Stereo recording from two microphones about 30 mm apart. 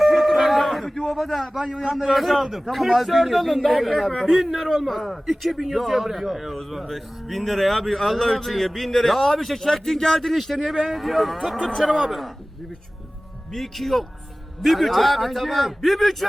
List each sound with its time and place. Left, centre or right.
0.0 s a sound: centre
1.1 s a man's voice: centre
1.9 s a man's voice: centre
2.1 s a man's voice: centre
4.9 s a man's voice: centre
11.5 s speech: left
11.8 s a man's voice: centre
13.5 s a man's voice: centre